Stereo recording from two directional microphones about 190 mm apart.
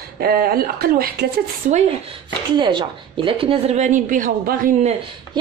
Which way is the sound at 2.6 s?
25° right (ahead or behind).